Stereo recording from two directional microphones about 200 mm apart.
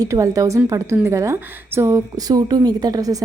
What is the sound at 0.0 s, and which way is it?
A woman's voice, 15° right (ahead or behind).